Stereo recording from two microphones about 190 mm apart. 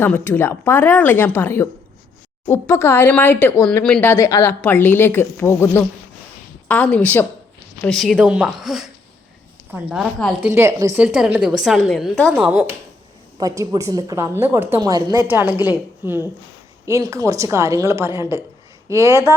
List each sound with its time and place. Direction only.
0.0 s a woman's voice: 10° left (ahead or behind)
9.9 s a woman's voice: centre (ahead or behind)
10.5 s a woman's voice: 15° right (ahead or behind)
11.0 s a woman's voice: 5° right (ahead or behind)
13.4 s a woman's voice: 15° right (ahead or behind)